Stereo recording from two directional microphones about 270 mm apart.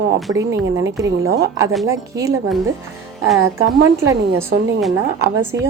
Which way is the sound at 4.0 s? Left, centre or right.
Centre.